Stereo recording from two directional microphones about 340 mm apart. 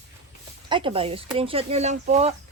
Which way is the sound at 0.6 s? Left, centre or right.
Centre.